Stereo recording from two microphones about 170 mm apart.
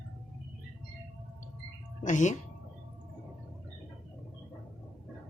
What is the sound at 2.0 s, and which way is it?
Speech, 45° left (ahead or behind).